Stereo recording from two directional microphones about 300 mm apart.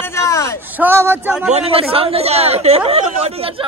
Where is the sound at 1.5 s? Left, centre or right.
Centre.